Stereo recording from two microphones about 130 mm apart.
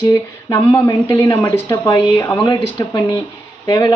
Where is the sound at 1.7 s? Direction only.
35° left (ahead or behind).